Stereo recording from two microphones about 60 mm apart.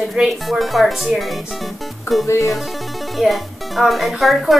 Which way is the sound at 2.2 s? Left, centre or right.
Left.